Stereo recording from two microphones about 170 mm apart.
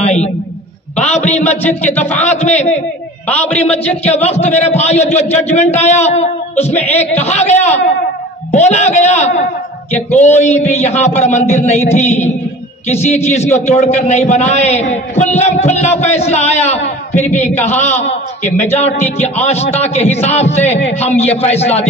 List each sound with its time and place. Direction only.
0.0 s a sound: 40° left (ahead or behind)
0.9 s a man's voice: 40° left (ahead or behind)
3.5 s a man's voice: 40° left (ahead or behind)